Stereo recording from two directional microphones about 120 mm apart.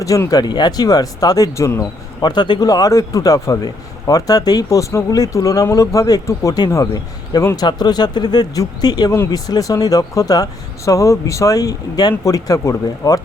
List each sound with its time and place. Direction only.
0.0 s a man's voice: 30° left (ahead or behind)
2.2 s a man's voice: 40° left (ahead or behind)
9.1 s speech: 20° left (ahead or behind)